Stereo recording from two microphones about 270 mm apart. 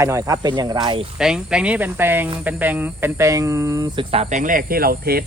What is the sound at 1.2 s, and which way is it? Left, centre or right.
Speech, centre.